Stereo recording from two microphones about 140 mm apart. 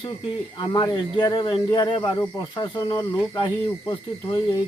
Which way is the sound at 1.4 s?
30° left (ahead or behind).